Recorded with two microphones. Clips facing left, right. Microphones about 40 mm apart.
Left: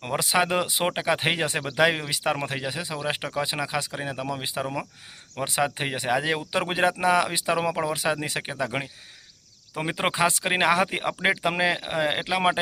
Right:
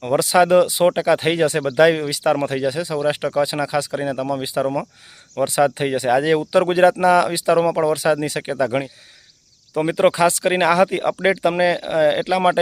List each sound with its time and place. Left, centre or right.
0.2 s speech: centre